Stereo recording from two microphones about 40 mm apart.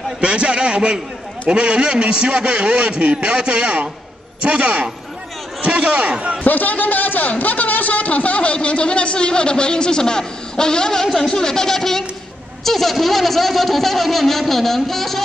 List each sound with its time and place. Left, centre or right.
0.2 s a man's voice: right
6.4 s speech: left; by 15.2 s centre